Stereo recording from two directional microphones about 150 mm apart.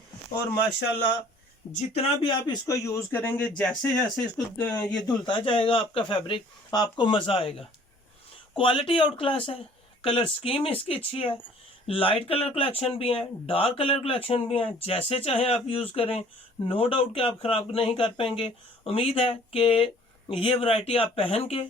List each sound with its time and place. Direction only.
1.7 s speech: 45° left (ahead or behind)
2.2 s a man's voice: 25° left (ahead or behind); by 4.0 s 5° left (ahead or behind)
4.8 s speech: 25° left (ahead or behind)
8.5 s speech: 35° left (ahead or behind)